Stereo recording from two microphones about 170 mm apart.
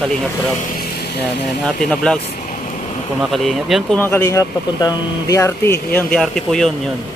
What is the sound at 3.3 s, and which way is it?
Speech, centre (ahead or behind).